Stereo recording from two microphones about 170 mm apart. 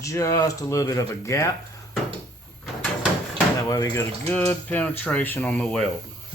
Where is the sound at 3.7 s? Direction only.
20° left (ahead or behind).